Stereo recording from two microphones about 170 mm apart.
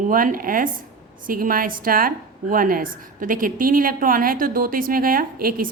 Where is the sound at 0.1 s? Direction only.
55° right (ahead or behind).